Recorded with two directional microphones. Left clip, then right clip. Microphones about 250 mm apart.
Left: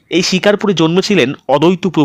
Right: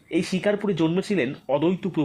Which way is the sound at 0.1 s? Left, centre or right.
Left.